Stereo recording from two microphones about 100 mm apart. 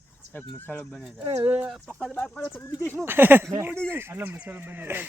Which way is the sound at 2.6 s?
20° left (ahead or behind).